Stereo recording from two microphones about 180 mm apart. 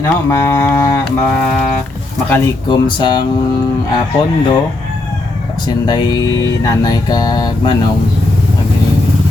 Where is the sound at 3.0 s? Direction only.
25° left (ahead or behind).